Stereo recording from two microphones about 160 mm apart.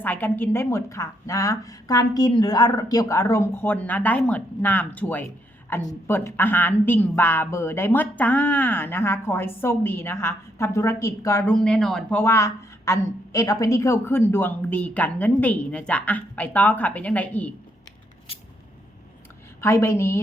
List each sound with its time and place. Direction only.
0.0 s a woman's voice: 10° left (ahead or behind)
11.4 s speech: 5° left (ahead or behind)
12.2 s a woman's voice: 15° left (ahead or behind)
19.6 s a woman's voice: 15° left (ahead or behind)